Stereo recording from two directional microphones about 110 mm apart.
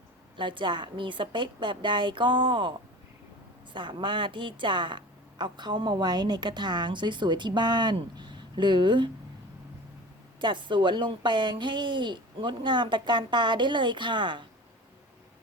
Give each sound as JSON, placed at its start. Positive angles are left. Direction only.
{"t": 0.3, "sound": "a woman's voice", "side_deg": -45}
{"t": 10.4, "sound": "a woman's voice", "side_deg": -45}